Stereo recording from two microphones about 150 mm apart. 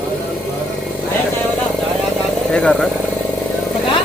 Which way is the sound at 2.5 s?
5° left (ahead or behind).